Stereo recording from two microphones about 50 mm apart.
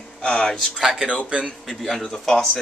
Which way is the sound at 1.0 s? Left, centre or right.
Centre.